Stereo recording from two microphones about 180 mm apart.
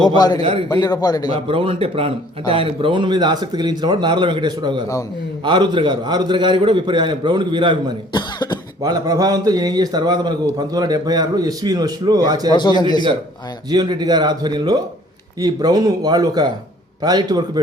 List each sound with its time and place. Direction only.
0.2 s a man's voice: 20° left (ahead or behind)
1.3 s a man's voice: 30° right (ahead or behind)
8.1 s a man's voice: 25° left (ahead or behind)
8.8 s a man's voice: 20° right (ahead or behind)
12.5 s a man's voice: 25° left (ahead or behind)
13.7 s a man's voice: 25° right (ahead or behind)